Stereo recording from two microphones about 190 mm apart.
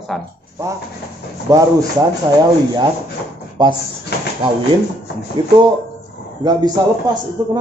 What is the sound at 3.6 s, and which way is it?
Speech, 25° right (ahead or behind).